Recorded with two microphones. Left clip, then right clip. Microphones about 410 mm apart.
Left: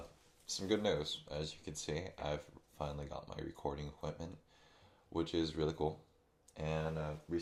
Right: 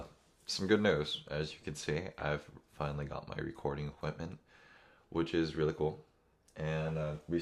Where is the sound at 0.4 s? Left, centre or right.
Right.